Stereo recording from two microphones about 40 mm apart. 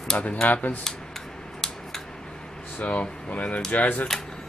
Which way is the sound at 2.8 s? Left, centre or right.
Left.